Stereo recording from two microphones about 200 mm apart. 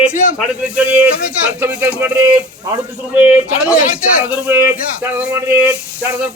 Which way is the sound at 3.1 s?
5° right (ahead or behind).